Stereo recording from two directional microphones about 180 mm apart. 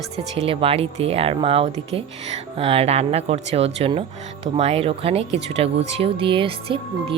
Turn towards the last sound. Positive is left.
turn(degrees=-30)  # may be behind; listen again after turning